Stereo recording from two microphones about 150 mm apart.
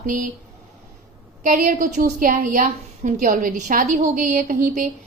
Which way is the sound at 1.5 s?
60° right (ahead or behind).